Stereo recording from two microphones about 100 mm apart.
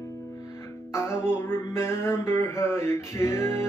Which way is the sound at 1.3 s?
25° left (ahead or behind).